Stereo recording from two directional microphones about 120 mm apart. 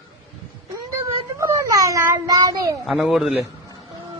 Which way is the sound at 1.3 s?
25° right (ahead or behind).